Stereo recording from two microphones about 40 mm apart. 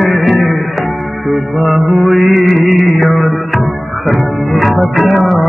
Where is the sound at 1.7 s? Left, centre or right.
Right.